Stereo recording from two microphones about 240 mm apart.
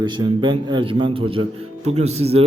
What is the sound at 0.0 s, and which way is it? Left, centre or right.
A man's voice, centre.